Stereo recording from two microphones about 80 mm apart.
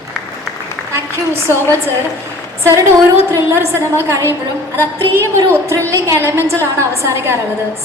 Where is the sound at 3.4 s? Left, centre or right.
Right.